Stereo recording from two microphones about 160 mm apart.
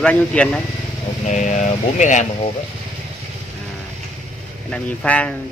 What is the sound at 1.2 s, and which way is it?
Speech, 50° left (ahead or behind).